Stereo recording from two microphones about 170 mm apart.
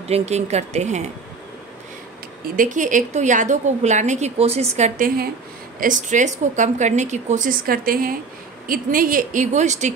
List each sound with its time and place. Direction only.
0.1 s speech: 40° right (ahead or behind)
2.5 s a woman's voice: 50° right (ahead or behind)